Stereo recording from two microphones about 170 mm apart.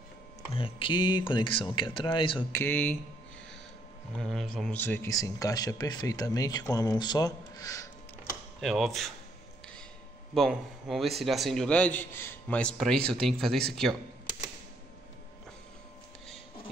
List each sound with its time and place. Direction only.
0.6 s speech: 30° left (ahead or behind)
2.5 s speech: 10° left (ahead or behind)
4.2 s speech: centre (ahead or behind); by 7.9 s 20° left (ahead or behind)
8.5 s a man's voice: centre (ahead or behind)
10.3 s a man's voice: centre (ahead or behind)